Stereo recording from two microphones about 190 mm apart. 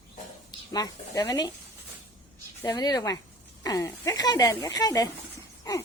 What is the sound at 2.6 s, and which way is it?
A woman's voice, 20° left (ahead or behind).